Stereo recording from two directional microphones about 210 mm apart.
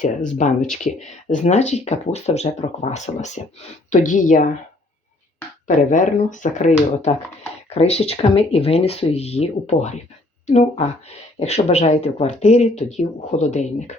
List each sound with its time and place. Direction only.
0.0 s speech: 35° left (ahead or behind)
5.6 s speech: 35° left (ahead or behind)